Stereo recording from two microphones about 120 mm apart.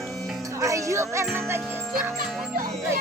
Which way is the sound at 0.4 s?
25° right (ahead or behind).